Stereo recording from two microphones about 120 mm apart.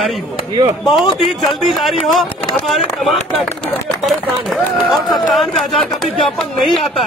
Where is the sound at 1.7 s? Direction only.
Centre (ahead or behind).